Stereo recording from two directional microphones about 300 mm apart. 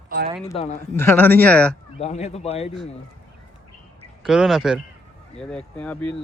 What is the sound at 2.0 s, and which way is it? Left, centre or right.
Speech, left.